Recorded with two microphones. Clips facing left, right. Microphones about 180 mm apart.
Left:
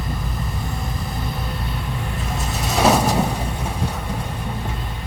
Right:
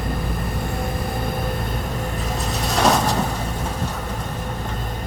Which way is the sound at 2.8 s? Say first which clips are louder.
Left 2 dB; 5° left (ahead or behind).